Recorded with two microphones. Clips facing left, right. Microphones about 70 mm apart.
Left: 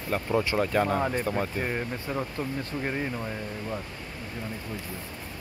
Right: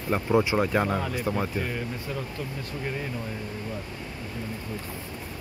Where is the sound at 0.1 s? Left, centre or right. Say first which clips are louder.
Right 3 dB; centre.